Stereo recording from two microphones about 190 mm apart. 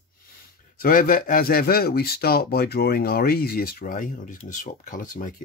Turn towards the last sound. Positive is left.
turn(degrees=45)  # may be behind; listen again after turning